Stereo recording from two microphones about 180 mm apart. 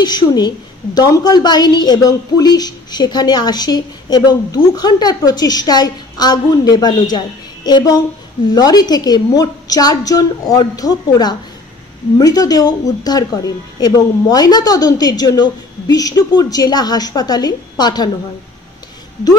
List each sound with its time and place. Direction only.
0.0 s speech: 25° left (ahead or behind)